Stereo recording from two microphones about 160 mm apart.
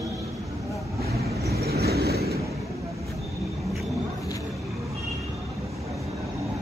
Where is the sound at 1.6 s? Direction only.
80° right.